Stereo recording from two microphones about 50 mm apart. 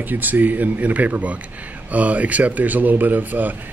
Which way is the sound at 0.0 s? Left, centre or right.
Right.